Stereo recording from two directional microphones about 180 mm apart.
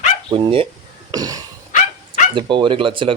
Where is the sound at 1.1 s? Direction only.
20° right (ahead or behind).